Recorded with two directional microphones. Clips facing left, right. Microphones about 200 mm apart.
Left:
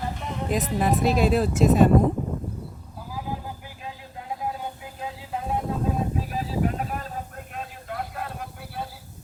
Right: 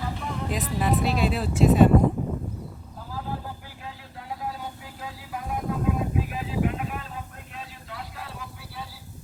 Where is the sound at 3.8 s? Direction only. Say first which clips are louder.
Left 2 dB; 20° left (ahead or behind); by 8.9 s 55° left (ahead or behind).